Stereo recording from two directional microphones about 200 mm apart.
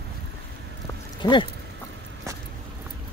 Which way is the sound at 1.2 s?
25° left (ahead or behind).